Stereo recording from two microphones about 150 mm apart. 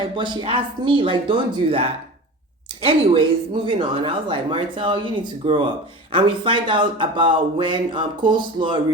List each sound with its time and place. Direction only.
0.0 s speech: 30° right (ahead or behind)